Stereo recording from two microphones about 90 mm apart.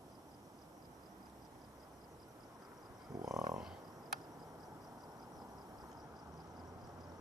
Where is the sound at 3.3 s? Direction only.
40° right (ahead or behind).